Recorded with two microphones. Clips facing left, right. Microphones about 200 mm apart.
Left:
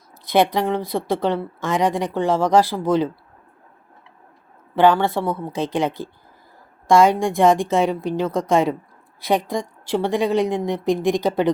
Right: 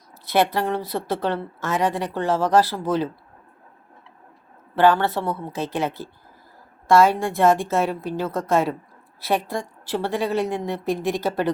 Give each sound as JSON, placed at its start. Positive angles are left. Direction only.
{"t": 0.3, "sound": "a woman's voice", "side_deg": 15}
{"t": 4.7, "sound": "a woman's voice", "side_deg": 15}